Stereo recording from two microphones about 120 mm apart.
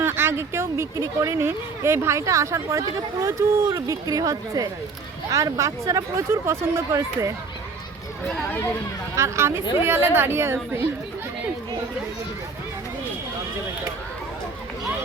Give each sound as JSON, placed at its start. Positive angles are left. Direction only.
{"t": 0.0, "sound": "speech", "side_deg": -20}
{"t": 8.4, "sound": "speech", "side_deg": 15}
{"t": 9.1, "sound": "speech", "side_deg": -25}